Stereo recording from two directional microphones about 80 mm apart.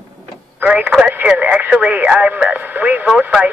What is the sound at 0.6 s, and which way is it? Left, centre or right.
Speech, right.